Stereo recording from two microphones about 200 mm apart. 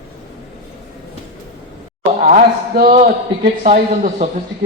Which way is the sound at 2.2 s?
45° right (ahead or behind).